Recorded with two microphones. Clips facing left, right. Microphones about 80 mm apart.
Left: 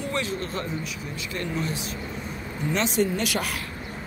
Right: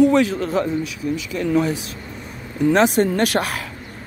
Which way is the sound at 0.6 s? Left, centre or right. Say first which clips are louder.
Right 11 dB; right.